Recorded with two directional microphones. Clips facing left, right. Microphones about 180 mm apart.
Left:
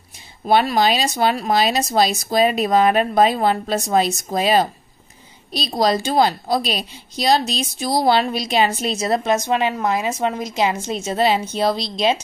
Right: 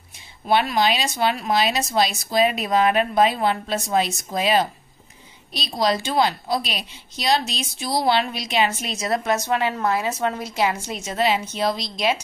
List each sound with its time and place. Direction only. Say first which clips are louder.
0.5 s a woman's voice: left 3 dB; 40° left (ahead or behind)